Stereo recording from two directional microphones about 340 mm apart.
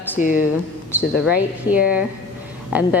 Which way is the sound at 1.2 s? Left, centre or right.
Centre.